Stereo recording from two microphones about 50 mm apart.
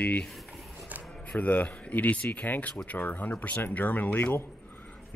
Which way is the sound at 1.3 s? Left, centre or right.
Left.